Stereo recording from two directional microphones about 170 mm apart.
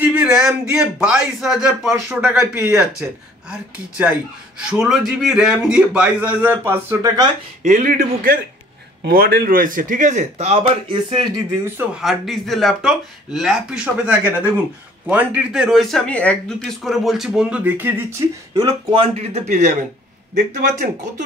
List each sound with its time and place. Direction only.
0.0 s a man's voice: 10° right (ahead or behind)
4.0 s a man's voice: 5° right (ahead or behind)
7.6 s a man's voice: 50° right (ahead or behind); by 11.2 s 30° right (ahead or behind)
12.0 s a man's voice: centre (ahead or behind)
18.5 s speech: 25° right (ahead or behind)
19.1 s a man's voice: 45° right (ahead or behind)